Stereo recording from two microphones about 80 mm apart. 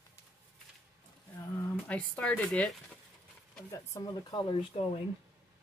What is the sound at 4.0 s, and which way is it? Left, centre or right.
Speech, left.